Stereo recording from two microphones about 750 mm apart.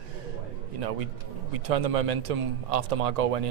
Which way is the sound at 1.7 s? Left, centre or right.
Right.